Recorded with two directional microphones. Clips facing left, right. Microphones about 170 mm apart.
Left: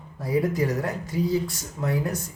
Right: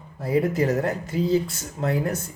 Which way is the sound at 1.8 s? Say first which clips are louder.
Right 2 dB; 60° right (ahead or behind).